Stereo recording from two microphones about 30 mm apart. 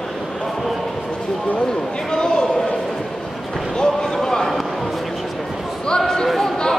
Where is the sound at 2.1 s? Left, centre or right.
Left.